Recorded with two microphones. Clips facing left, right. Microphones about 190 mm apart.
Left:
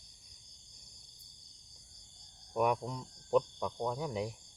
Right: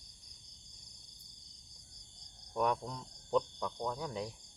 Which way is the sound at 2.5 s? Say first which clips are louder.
Left 2 dB; 10° left (ahead or behind).